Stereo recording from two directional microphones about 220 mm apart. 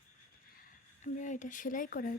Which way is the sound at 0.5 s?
35° left (ahead or behind).